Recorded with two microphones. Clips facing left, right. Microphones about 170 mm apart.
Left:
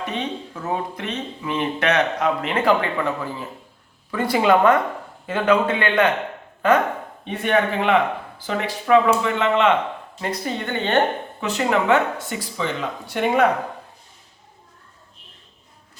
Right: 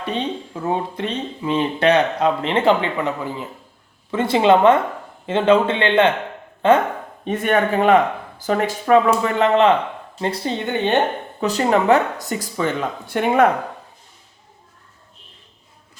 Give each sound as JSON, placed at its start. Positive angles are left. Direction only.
{"t": 0.0, "sound": "speech", "side_deg": -30}
{"t": 7.3, "sound": "speech", "side_deg": -45}